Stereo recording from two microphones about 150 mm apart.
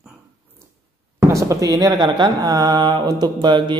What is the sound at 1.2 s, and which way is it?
Speech, 20° right (ahead or behind).